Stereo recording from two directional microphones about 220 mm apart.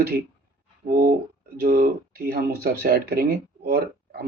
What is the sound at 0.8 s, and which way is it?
Speech, 35° right (ahead or behind).